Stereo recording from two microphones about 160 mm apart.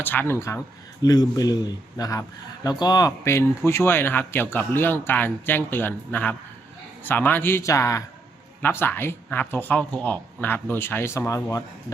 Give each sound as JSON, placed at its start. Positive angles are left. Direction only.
{"t": 0.0, "sound": "a man's voice", "side_deg": 10}